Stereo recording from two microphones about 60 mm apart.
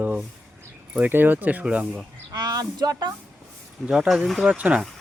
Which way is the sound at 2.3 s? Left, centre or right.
Right.